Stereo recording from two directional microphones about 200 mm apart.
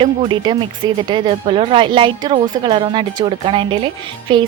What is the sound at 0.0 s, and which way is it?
Speech, 25° right (ahead or behind).